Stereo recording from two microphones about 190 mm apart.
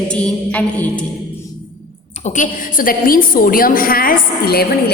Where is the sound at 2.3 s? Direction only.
45° left (ahead or behind).